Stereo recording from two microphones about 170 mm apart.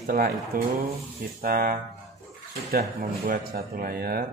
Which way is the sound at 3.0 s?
60° right (ahead or behind).